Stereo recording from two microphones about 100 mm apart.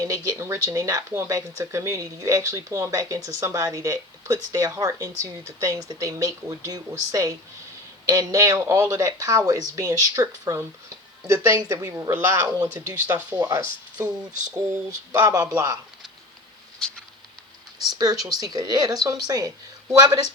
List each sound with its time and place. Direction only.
0.0 s a woman's voice: 30° right (ahead or behind)
13.1 s a woman's voice: 15° right (ahead or behind); by 15.8 s 30° right (ahead or behind)
16.8 s a sound: 5° left (ahead or behind)
17.9 s speech: 40° right (ahead or behind)